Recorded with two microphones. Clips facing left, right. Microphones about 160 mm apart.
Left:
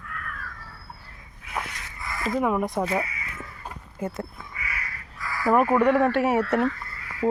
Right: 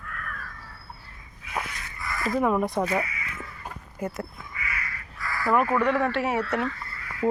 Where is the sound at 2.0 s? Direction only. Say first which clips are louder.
Even; 25° left (ahead or behind).